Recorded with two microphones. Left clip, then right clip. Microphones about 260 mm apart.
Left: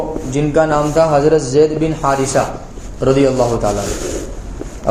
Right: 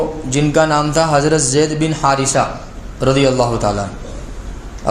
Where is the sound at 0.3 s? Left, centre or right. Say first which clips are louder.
Even; right.